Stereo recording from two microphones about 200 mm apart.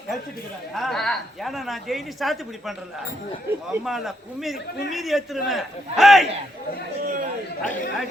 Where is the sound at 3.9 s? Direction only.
Centre (ahead or behind).